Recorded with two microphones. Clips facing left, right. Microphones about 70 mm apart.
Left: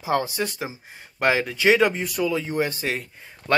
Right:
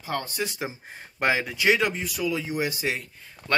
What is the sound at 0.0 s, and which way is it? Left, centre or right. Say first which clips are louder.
Speech: left 6 dB; centre.